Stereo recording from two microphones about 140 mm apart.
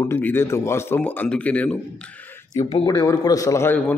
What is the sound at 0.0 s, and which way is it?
A man's voice, 15° left (ahead or behind).